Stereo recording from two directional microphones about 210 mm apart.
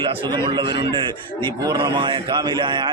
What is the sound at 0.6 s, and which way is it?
Speech, 55° left (ahead or behind).